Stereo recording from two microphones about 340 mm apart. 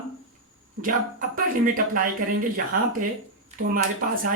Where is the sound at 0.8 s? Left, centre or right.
Right.